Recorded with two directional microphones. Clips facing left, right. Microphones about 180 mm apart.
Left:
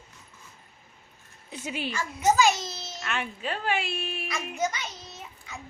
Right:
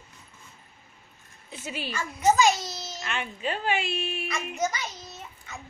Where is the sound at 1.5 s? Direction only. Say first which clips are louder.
Left 2 dB; 15° left (ahead or behind).